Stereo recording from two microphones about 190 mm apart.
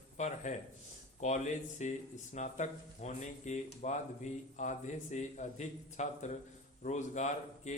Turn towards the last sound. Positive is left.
turn(degrees=40)  # may be behind; listen again after turning